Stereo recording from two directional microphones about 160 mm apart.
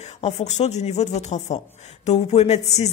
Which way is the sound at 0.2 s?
45° left (ahead or behind).